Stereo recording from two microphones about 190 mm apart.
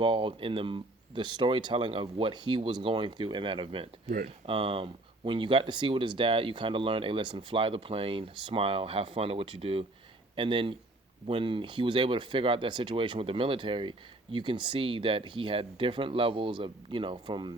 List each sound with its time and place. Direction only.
0.0 s speech: 25° right (ahead or behind)